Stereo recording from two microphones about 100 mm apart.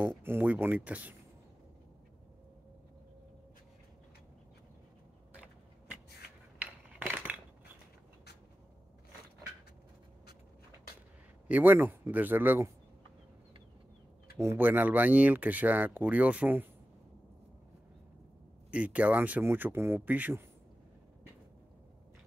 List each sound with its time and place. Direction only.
0.2 s speech: 20° right (ahead or behind)
6.6 s a sound: 15° right (ahead or behind)
11.4 s a man's voice: 15° right (ahead or behind)
14.4 s speech: 20° right (ahead or behind)
18.7 s speech: 15° right (ahead or behind)